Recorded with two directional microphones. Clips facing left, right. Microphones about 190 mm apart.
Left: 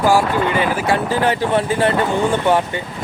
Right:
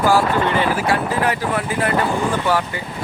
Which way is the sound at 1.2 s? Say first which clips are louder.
Left 4 dB; 30° left (ahead or behind).